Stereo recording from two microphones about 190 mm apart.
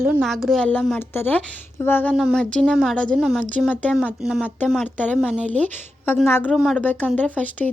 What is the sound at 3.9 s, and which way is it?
A woman's voice, 5° right (ahead or behind).